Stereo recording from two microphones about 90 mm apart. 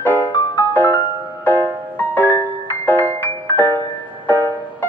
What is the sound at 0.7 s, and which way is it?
Music, 20° left (ahead or behind).